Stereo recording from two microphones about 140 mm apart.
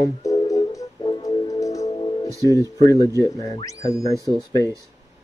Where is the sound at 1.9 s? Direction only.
35° left (ahead or behind).